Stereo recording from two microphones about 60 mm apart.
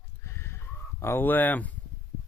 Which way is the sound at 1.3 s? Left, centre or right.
Left.